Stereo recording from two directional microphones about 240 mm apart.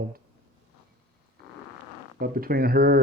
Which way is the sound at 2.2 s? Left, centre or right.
Right.